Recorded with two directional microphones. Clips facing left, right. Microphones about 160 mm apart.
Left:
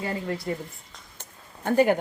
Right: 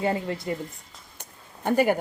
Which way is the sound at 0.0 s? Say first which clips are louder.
Right 3 dB; 25° right (ahead or behind).